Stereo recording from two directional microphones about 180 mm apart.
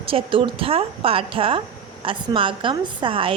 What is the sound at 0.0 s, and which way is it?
A woman's voice, 30° right (ahead or behind).